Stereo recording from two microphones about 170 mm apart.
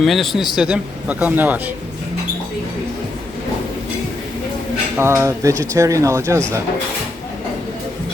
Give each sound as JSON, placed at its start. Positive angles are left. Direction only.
{"t": 0.0, "sound": "a man's voice", "side_deg": 0}
{"t": 4.9, "sound": "speech", "side_deg": -15}